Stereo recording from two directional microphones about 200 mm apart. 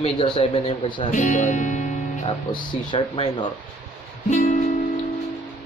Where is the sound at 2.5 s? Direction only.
20° left (ahead or behind).